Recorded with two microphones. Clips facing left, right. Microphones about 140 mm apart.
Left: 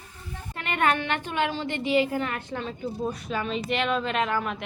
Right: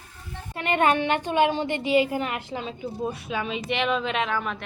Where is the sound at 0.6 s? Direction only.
25° right (ahead or behind); by 4.7 s 5° left (ahead or behind).